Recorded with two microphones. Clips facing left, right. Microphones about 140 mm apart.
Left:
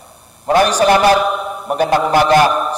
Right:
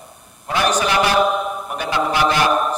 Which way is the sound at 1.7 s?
40° left (ahead or behind).